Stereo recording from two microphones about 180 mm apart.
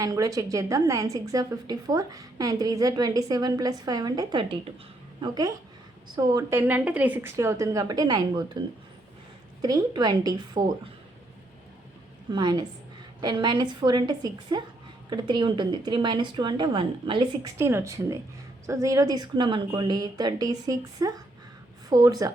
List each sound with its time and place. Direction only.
0.0 s a woman's voice: 20° right (ahead or behind)
12.3 s a woman's voice: 25° right (ahead or behind)
17.6 s a woman's voice: 15° right (ahead or behind)